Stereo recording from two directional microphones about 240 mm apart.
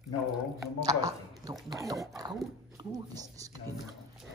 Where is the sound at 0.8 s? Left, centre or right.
Centre.